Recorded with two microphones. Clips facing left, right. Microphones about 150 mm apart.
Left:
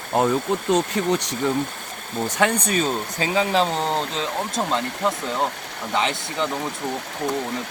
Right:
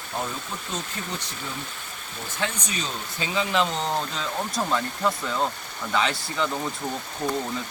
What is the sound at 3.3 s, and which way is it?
Speech, 35° left (ahead or behind).